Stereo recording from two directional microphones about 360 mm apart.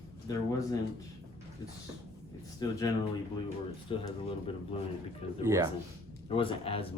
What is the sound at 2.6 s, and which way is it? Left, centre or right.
Speech, centre.